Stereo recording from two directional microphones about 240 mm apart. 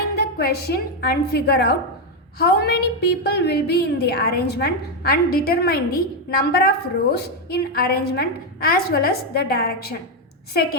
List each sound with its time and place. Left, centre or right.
0.0 s a woman's voice: left